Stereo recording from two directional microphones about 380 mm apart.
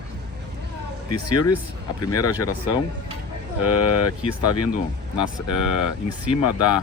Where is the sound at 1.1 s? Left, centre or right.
Left.